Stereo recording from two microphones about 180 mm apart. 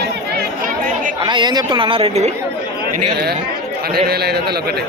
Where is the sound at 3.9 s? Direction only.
60° right (ahead or behind).